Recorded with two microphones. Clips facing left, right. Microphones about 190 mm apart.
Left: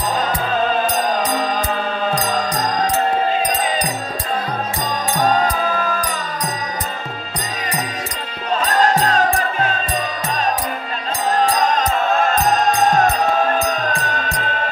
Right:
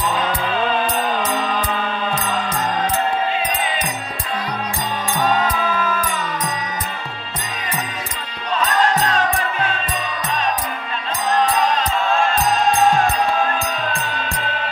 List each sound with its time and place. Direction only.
0.1 s music: 40° left (ahead or behind)
5.2 s music: 40° left (ahead or behind)
8.5 s music: 40° left (ahead or behind)
11.4 s music: 45° left (ahead or behind)